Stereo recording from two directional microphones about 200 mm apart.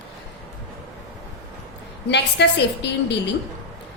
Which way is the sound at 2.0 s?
60° left (ahead or behind).